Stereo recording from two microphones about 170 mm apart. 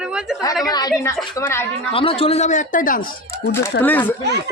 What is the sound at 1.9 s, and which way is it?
A man's voice, 35° left (ahead or behind).